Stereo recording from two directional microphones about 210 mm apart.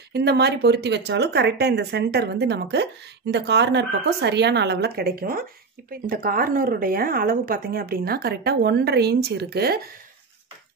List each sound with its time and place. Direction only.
0.1 s speech: 50° right (ahead or behind)